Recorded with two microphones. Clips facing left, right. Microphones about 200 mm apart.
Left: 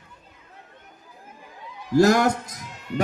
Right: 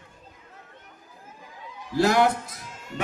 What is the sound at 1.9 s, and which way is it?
Speech, 45° left (ahead or behind).